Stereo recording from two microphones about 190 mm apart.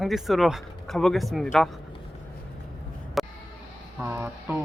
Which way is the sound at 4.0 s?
10° right (ahead or behind).